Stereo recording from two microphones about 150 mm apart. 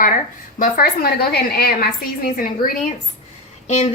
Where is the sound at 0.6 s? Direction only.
80° left.